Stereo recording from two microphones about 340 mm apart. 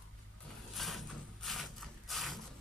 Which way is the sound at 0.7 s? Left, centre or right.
Centre.